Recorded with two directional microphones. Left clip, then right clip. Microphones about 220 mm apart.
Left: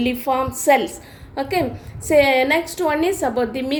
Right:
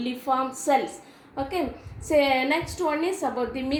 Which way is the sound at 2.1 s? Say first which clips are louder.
Left 7 dB; 40° left (ahead or behind).